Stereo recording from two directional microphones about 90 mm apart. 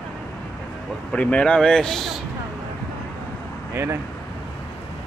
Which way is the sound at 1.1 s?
15° left (ahead or behind).